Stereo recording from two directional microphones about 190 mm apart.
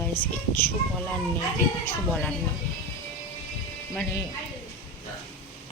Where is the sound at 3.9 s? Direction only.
10° left (ahead or behind).